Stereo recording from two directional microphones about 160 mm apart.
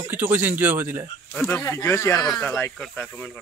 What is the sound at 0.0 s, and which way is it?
Speech, 10° right (ahead or behind).